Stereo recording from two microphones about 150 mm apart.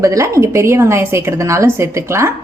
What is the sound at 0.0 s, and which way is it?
A woman's voice, 20° right (ahead or behind).